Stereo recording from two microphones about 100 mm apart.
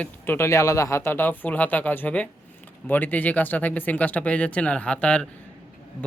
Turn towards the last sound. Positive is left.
turn(degrees=10)  # may be behind; listen again after turning